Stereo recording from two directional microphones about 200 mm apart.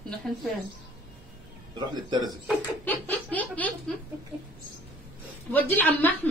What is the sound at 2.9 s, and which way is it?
Speech, 10° left (ahead or behind).